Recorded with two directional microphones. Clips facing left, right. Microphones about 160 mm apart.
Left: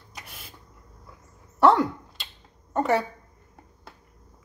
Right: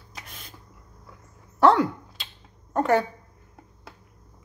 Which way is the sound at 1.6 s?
Centre (ahead or behind).